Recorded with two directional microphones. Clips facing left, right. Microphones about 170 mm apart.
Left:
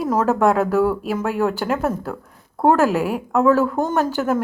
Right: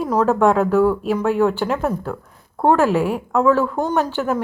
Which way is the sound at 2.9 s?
5° left (ahead or behind).